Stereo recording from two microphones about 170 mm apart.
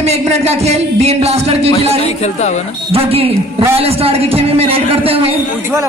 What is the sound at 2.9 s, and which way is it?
Speech, 35° right (ahead or behind).